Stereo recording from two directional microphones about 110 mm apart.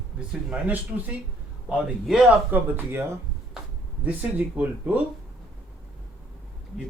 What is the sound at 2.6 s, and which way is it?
Speech, 20° right (ahead or behind).